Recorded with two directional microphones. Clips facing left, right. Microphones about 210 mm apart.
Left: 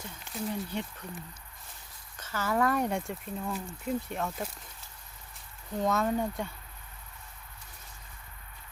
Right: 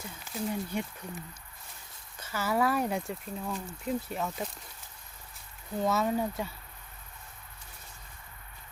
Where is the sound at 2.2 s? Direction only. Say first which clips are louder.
Even; 10° right (ahead or behind).